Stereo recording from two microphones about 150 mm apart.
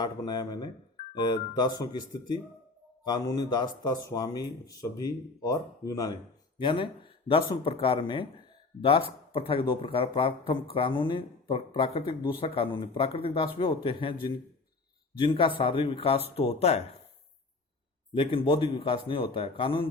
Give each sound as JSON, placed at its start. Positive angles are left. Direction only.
{"t": 0.0, "sound": "speech", "side_deg": 30}
{"t": 6.6, "sound": "speech", "side_deg": 35}
{"t": 18.1, "sound": "speech", "side_deg": 35}